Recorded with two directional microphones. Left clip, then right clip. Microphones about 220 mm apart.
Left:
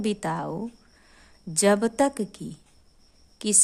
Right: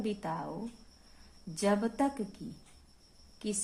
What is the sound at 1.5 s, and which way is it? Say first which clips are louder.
Speech: left 10 dB; 50° left (ahead or behind).